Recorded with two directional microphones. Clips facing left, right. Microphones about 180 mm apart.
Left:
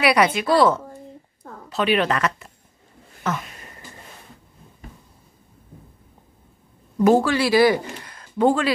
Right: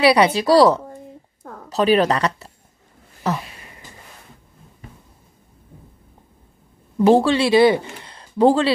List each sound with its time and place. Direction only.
0.0 s a woman's voice: 30° right (ahead or behind)
7.0 s a man's voice: 30° right (ahead or behind)